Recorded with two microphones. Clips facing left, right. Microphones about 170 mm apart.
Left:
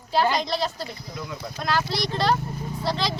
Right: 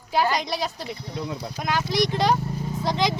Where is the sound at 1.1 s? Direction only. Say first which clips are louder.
Right 5 dB; 35° right (ahead or behind).